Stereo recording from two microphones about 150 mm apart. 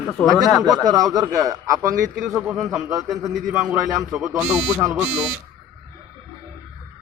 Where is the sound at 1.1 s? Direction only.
25° right (ahead or behind).